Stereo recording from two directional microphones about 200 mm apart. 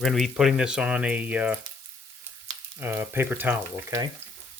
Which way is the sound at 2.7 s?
10° right (ahead or behind).